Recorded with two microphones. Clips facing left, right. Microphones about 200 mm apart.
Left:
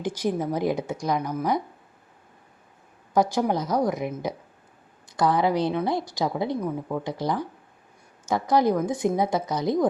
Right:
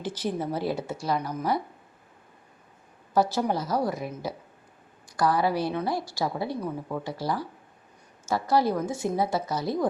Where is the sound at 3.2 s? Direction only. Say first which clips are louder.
Left 2 dB; 15° left (ahead or behind).